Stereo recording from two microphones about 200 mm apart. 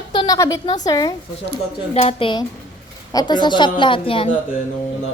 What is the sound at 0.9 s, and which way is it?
Speech, 20° left (ahead or behind).